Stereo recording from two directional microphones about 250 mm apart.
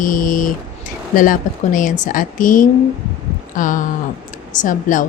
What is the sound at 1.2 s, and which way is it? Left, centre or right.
Speech, left.